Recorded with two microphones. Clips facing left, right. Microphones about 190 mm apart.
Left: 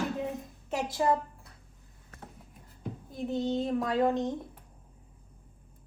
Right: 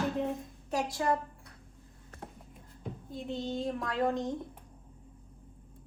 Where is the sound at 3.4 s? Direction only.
25° left (ahead or behind).